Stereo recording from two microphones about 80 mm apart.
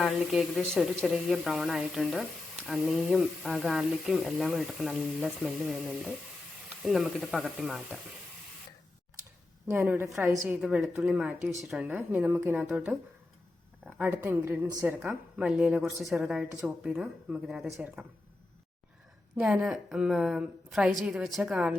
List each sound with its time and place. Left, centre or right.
0.0 s speech: centre
9.6 s a woman's voice: right
11.0 s a woman's voice: centre
11.9 s speech: right
12.7 s a woman's voice: centre
14.1 s a woman's voice: right
15.4 s a woman's voice: centre
19.4 s a woman's voice: centre